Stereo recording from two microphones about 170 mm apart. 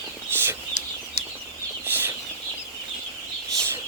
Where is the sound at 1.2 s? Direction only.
40° left (ahead or behind).